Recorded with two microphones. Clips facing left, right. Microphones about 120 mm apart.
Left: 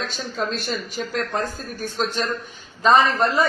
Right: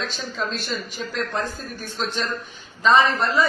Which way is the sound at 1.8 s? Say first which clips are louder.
Left 3 dB; 40° left (ahead or behind).